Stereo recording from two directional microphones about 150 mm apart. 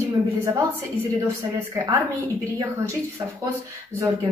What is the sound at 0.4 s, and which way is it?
A woman's voice, 15° right (ahead or behind).